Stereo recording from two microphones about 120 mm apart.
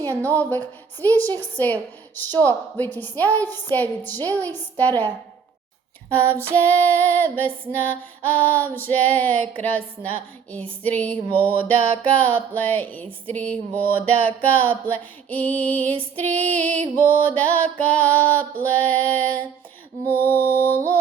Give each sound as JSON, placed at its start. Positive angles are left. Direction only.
{"t": 0.0, "sound": "female singing", "side_deg": 15}